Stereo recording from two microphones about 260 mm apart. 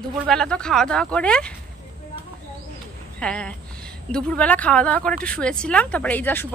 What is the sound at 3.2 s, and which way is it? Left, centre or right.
Speech, centre.